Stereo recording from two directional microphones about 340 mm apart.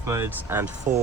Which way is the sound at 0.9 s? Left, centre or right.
Right.